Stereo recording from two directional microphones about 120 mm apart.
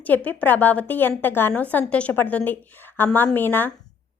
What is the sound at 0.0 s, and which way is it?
A woman's voice, 15° left (ahead or behind).